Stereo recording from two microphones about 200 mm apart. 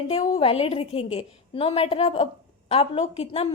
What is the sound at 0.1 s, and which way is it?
A woman's voice, 30° left (ahead or behind).